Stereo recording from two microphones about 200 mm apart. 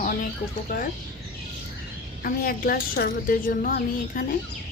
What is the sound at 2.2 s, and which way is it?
Speech, 45° left (ahead or behind).